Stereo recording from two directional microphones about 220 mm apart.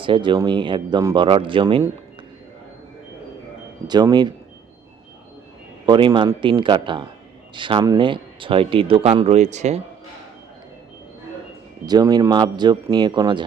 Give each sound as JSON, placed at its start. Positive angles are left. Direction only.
{"t": 0.0, "sound": "speech", "side_deg": -20}
{"t": 3.8, "sound": "speech", "side_deg": -20}
{"t": 5.8, "sound": "speech", "side_deg": -20}
{"t": 11.9, "sound": "speech", "side_deg": -20}